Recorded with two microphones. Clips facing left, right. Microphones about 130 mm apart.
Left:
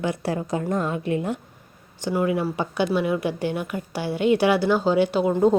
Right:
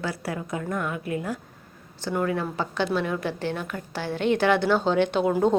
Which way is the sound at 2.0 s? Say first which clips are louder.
Left 3 dB; 10° left (ahead or behind).